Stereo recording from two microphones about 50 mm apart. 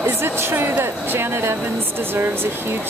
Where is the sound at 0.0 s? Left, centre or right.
Right.